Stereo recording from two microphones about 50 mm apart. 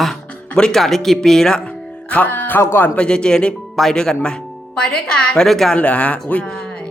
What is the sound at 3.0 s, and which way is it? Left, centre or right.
Speech, centre.